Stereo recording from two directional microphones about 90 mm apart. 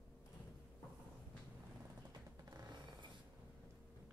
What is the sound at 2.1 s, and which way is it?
Music, 50° right (ahead or behind).